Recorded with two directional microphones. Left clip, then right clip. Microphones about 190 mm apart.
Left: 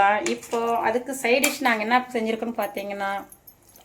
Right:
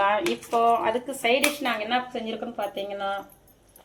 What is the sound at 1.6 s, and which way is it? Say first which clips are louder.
A woman's voice: left 5 dB; 50° left (ahead or behind).